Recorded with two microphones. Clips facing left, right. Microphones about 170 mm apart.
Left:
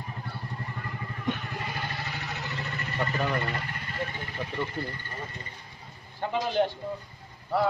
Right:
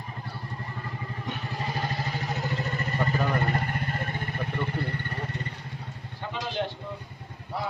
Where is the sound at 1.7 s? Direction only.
35° right (ahead or behind); by 5.5 s 65° right (ahead or behind).